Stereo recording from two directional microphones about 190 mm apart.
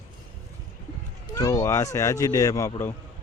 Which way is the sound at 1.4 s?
20° left (ahead or behind).